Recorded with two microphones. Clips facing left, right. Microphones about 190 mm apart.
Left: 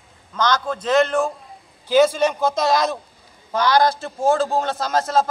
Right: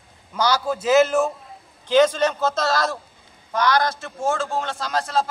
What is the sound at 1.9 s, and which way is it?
A man's voice, 10° left (ahead or behind).